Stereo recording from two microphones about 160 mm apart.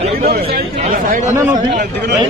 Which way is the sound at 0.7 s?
50° right (ahead or behind).